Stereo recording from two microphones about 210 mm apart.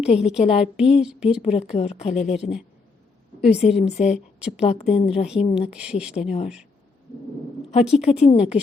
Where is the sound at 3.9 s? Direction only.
30° left (ahead or behind).